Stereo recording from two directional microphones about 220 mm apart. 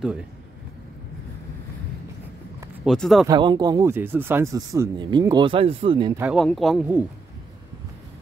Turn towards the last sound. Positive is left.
turn(degrees=0)  # may be behind; listen again after turning